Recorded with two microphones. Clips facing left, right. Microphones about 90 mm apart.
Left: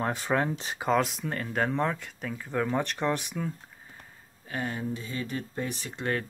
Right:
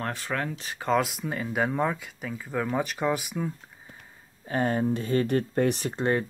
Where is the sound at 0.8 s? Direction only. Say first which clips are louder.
Right 1 dB; centre (ahead or behind).